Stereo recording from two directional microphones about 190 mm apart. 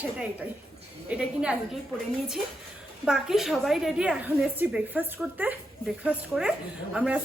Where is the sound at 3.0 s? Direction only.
Centre (ahead or behind).